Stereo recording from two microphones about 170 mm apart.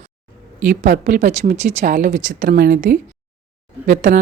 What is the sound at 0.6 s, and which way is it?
Speech, 45° right (ahead or behind).